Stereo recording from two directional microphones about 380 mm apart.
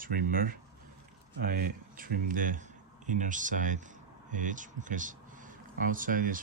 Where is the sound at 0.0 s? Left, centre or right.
Right.